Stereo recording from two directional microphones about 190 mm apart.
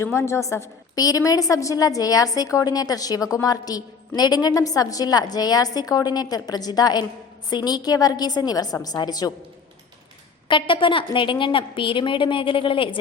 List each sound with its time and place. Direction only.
0.0 s a woman's voice: 15° left (ahead or behind)
10.5 s a woman's voice: 25° left (ahead or behind)